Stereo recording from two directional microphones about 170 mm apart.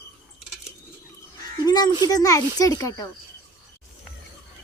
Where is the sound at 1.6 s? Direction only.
25° left (ahead or behind).